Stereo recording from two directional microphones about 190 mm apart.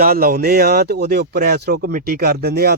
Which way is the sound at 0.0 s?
50° right (ahead or behind).